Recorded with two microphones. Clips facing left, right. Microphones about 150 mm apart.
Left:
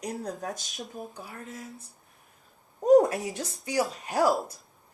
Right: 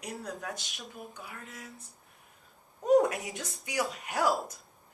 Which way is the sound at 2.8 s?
40° left (ahead or behind).